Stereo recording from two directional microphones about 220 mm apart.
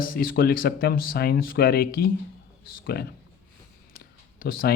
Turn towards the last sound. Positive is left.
turn(degrees=40)  # may be behind; listen again after turning